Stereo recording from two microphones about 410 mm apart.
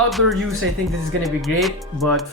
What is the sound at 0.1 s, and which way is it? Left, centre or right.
Speech, centre.